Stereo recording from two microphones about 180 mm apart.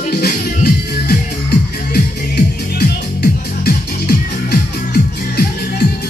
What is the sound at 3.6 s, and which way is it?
Music, 65° left (ahead or behind).